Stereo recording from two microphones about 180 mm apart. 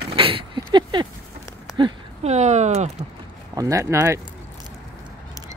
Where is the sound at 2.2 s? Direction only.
40° right (ahead or behind).